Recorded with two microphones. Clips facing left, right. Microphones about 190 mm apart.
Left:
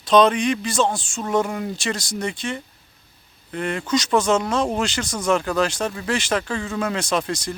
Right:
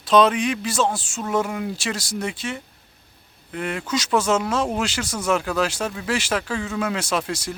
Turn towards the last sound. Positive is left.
turn(degrees=-5)  # may be behind; listen again after turning